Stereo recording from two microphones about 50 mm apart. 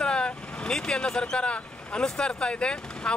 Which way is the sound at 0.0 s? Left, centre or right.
Centre.